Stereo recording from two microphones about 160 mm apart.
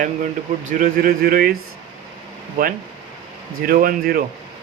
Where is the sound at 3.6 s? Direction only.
65° right (ahead or behind).